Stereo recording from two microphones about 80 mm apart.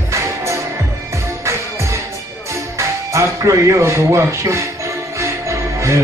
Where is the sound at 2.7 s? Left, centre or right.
Right.